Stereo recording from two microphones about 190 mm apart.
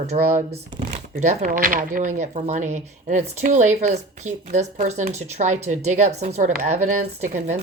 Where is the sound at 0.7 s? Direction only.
30° right (ahead or behind).